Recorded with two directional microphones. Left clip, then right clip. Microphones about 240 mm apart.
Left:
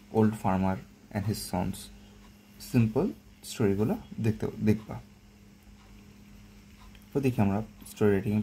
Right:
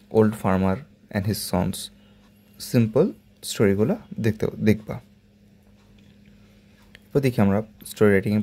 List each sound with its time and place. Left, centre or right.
0.1 s speech: right
2.7 s speech: right
7.1 s speech: right